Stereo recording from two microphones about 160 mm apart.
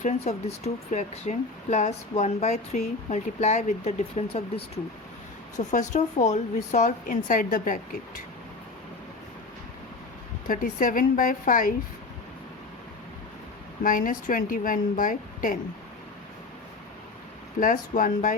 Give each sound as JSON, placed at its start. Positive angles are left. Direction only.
{"t": 0.0, "sound": "speech", "side_deg": 45}
{"t": 5.5, "sound": "speech", "side_deg": 50}
{"t": 10.5, "sound": "a woman's voice", "side_deg": 55}
{"t": 13.8, "sound": "a woman's voice", "side_deg": 55}
{"t": 17.6, "sound": "a woman's voice", "side_deg": 55}